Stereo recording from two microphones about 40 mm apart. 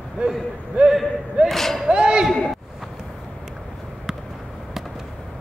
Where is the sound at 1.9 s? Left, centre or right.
Right.